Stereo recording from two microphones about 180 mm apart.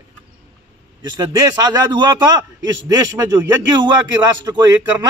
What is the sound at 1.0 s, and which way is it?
Speech, 25° right (ahead or behind).